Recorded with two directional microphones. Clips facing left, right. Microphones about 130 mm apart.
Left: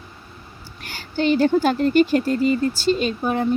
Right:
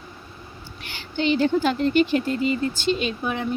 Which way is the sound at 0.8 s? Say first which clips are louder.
Left 3 dB; 45° left (ahead or behind).